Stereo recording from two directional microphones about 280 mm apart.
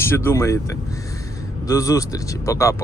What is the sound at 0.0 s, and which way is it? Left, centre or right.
Speech, centre.